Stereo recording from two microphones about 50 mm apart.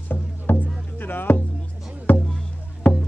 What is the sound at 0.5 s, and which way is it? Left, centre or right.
Music, left.